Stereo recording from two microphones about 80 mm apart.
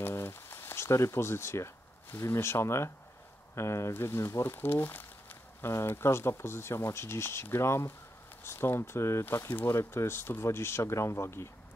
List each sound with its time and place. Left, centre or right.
0.0 s speech: left